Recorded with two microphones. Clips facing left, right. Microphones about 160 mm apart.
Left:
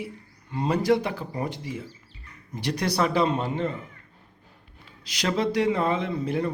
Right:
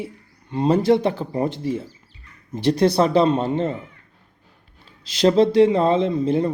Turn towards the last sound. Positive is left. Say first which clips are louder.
# right 7 dB
turn(degrees=-25)  # may be behind; listen again after turning